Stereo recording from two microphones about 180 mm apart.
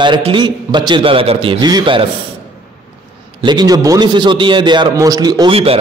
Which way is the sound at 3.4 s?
25° right (ahead or behind).